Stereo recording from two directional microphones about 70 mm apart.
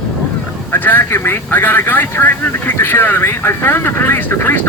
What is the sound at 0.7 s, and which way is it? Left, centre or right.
Speech, left.